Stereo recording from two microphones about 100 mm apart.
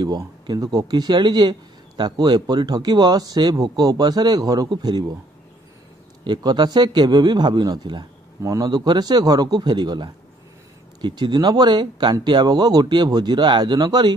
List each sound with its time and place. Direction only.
0.0 s speech: 45° right (ahead or behind)
6.2 s speech: 45° right (ahead or behind)